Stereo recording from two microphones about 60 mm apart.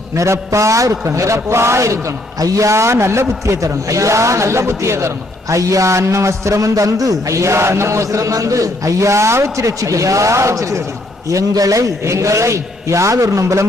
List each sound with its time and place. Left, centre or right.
0.1 s a man's voice: right
11.3 s a man's voice: right